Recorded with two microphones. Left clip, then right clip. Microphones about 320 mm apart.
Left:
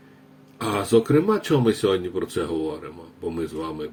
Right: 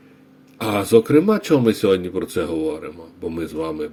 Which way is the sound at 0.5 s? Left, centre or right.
Right.